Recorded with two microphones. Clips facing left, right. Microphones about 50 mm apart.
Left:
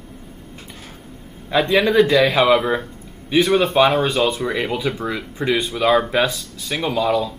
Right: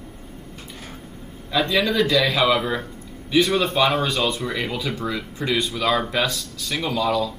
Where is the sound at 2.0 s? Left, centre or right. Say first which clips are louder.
Left 5 dB; centre.